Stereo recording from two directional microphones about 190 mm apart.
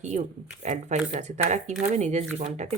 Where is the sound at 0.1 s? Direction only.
45° right (ahead or behind).